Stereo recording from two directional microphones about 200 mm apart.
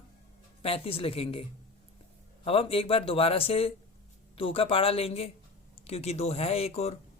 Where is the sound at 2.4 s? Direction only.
30° left (ahead or behind).